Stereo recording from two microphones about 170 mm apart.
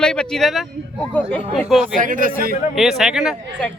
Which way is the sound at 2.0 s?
50° right (ahead or behind).